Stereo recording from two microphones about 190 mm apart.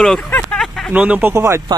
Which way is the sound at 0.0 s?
5° left (ahead or behind).